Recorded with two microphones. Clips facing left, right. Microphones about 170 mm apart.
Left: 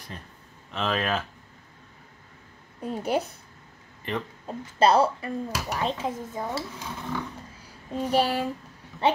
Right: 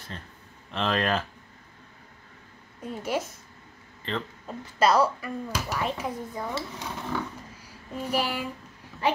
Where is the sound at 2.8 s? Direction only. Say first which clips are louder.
Left 3 dB; 35° left (ahead or behind).